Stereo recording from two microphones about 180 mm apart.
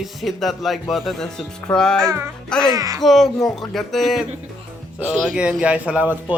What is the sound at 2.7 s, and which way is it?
Speech, 20° right (ahead or behind).